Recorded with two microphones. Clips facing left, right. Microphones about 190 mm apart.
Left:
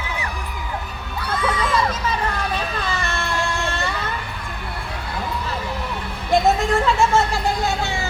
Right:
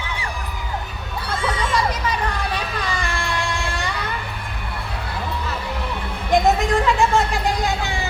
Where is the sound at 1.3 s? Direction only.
30° right (ahead or behind).